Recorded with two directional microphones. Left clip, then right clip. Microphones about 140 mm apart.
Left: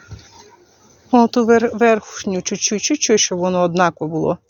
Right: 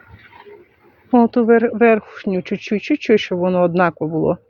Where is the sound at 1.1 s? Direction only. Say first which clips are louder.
Even; 5° right (ahead or behind).